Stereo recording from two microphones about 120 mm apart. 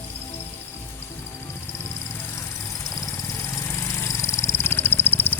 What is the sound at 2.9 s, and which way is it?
Vehicle, 25° left (ahead or behind).